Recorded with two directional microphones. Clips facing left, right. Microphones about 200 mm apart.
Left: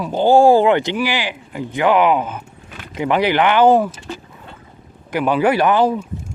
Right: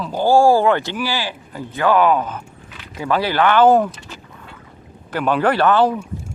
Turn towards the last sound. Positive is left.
turn(degrees=10)  # may be behind; listen again after turning